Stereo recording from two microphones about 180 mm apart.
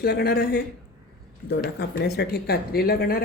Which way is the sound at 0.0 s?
60° left (ahead or behind).